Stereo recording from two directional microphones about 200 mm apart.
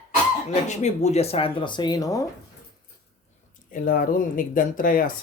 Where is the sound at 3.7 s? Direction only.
45° left (ahead or behind).